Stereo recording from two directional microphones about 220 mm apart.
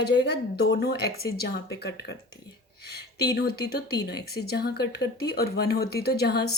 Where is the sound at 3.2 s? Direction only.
45° left (ahead or behind).